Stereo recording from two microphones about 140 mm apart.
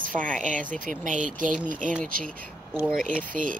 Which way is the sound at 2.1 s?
90° right.